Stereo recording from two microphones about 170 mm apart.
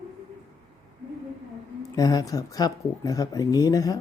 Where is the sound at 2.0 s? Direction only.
20° left (ahead or behind).